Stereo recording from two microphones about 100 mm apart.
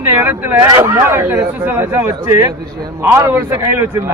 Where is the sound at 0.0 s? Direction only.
25° right (ahead or behind).